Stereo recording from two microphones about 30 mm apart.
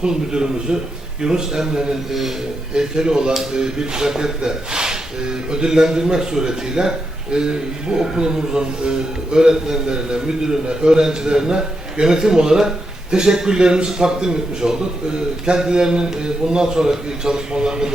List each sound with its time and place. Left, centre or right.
0.0 s a man's voice: right